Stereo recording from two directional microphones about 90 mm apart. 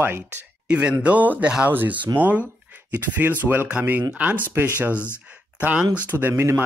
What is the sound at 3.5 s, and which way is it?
Speech, 20° right (ahead or behind).